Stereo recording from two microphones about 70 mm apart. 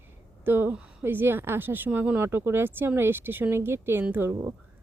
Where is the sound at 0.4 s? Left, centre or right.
Right.